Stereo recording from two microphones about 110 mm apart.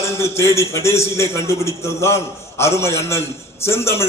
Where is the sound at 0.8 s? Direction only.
25° left (ahead or behind).